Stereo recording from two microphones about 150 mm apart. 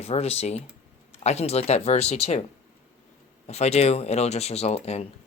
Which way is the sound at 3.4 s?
45° left (ahead or behind).